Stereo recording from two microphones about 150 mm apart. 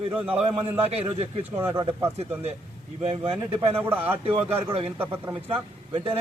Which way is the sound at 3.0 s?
45° right (ahead or behind).